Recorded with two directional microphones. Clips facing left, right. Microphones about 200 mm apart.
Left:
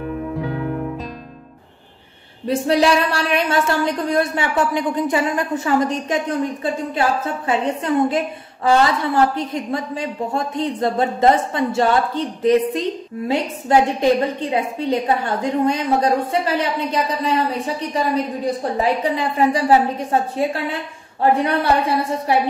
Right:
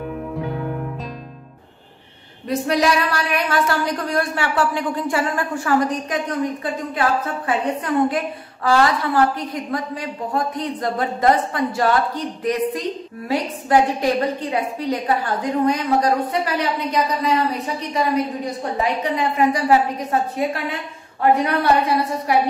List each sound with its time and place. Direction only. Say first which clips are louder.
2.4 s a woman's voice: left 3 dB; 30° left (ahead or behind)
14.5 s a woman's voice: left 2 dB; 25° left (ahead or behind)